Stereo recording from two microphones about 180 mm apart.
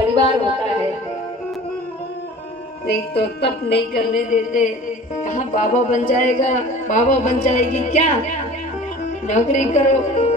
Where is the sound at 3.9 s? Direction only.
45° left (ahead or behind).